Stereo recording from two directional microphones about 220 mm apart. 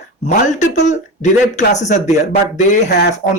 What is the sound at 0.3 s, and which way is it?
Speech, 35° left (ahead or behind).